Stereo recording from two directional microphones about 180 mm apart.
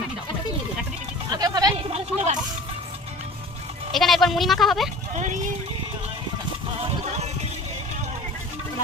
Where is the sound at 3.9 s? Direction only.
Centre (ahead or behind).